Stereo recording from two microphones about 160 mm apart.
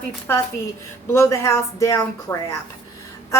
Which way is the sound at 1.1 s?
15° left (ahead or behind).